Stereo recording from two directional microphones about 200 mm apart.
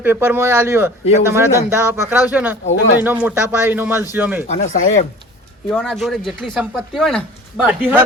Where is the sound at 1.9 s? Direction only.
10° right (ahead or behind).